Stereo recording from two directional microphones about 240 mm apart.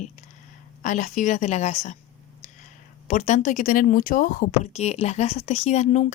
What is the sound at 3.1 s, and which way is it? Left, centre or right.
Speech, left.